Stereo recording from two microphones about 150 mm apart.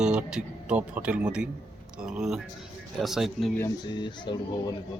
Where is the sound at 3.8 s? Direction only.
30° left (ahead or behind).